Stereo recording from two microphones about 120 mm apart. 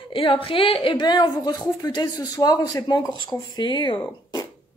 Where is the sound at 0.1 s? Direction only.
50° left (ahead or behind).